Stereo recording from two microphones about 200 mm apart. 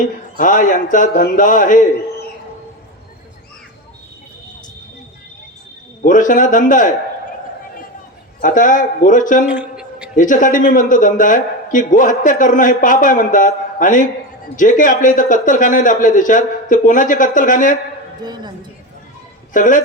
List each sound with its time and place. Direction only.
0.3 s a man's voice: 40° left (ahead or behind)
6.0 s a man's voice: 40° left (ahead or behind)
8.4 s a man's voice: 40° left (ahead or behind)
9.5 s a sound: 5° right (ahead or behind)
10.2 s a man's voice: 40° left (ahead or behind)
18.2 s a woman's voice: 20° right (ahead or behind)
19.5 s a man's voice: 40° left (ahead or behind)